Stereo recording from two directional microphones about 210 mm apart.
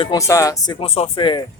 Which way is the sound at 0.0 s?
15° left (ahead or behind).